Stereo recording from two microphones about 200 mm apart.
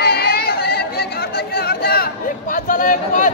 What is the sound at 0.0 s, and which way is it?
Chatter, 50° left (ahead or behind).